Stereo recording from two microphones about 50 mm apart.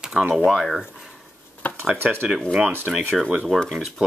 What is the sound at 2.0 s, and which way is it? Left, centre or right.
Speech, right.